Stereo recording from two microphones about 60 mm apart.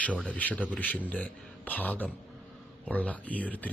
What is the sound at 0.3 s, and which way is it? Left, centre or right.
Speech, left.